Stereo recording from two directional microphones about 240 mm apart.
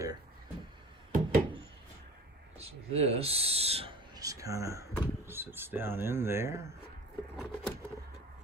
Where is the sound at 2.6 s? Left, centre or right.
Right.